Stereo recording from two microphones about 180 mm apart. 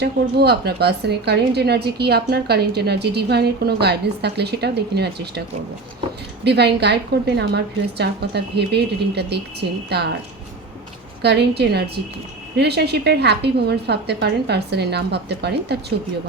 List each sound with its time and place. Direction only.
0.0 s a woman's voice: 65° right (ahead or behind)
6.4 s a woman's voice: 65° right (ahead or behind)
11.2 s a woman's voice: 65° right (ahead or behind)